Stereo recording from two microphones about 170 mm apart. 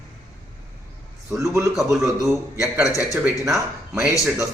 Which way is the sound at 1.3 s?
15° right (ahead or behind).